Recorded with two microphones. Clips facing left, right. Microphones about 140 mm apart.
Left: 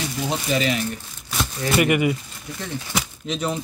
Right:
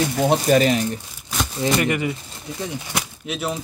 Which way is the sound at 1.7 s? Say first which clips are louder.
Left 3 dB; 10° left (ahead or behind).